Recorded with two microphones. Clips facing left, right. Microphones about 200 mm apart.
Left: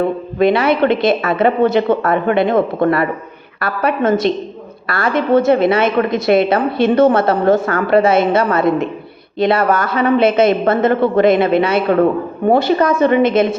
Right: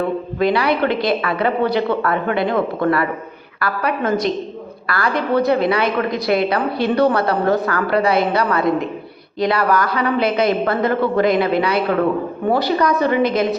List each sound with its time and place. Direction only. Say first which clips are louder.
0.3 s a woman's voice: left 5 dB; 25° left (ahead or behind)